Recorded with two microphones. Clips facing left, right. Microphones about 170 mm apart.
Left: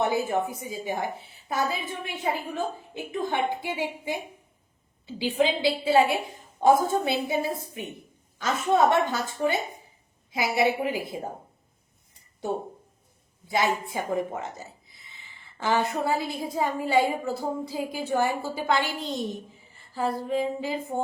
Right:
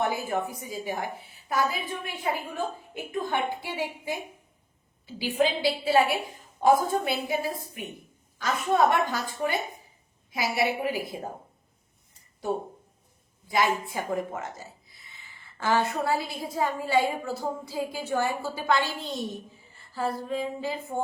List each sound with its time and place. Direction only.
0.1 s a woman's voice: 20° left (ahead or behind)
8.9 s a woman's voice: 20° left (ahead or behind)
13.5 s a woman's voice: 20° left (ahead or behind)
19.9 s a sound: 15° left (ahead or behind)